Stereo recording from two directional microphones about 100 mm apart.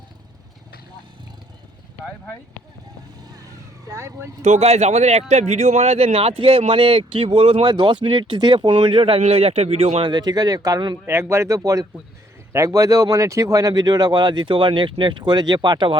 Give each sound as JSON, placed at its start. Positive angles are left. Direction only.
{"t": 3.3, "sound": "vehicle", "side_deg": -35}
{"t": 4.6, "sound": "speech", "side_deg": -90}
{"t": 7.6, "sound": "speech", "side_deg": -50}
{"t": 9.2, "sound": "speech", "side_deg": -90}
{"t": 10.1, "sound": "speech", "side_deg": -45}
{"t": 11.0, "sound": "speech", "side_deg": -25}